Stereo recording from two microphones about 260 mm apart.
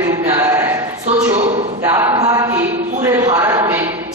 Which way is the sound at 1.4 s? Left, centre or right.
Right.